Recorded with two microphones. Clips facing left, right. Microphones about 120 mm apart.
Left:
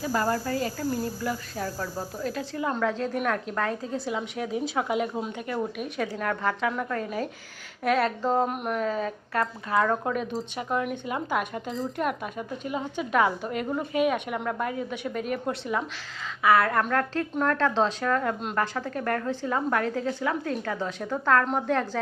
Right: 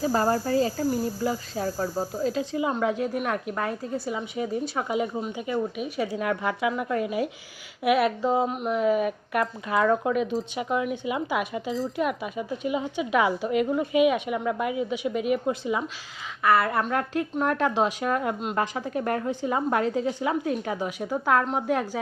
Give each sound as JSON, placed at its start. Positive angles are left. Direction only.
{"t": 0.0, "sound": "a woman's voice", "side_deg": -30}
{"t": 6.1, "sound": "a woman's voice", "side_deg": -10}
{"t": 8.8, "sound": "a woman's voice", "side_deg": -15}
{"t": 13.9, "sound": "a woman's voice", "side_deg": 40}
{"t": 14.3, "sound": "a woman's voice", "side_deg": -5}